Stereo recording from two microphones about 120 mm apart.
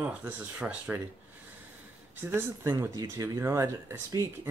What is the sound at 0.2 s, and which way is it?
Speech, 15° right (ahead or behind).